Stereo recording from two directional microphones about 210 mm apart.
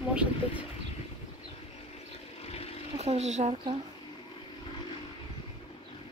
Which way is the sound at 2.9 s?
30° right (ahead or behind).